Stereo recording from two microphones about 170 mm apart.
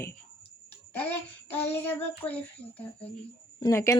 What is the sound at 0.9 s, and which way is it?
Child singing, 10° left (ahead or behind).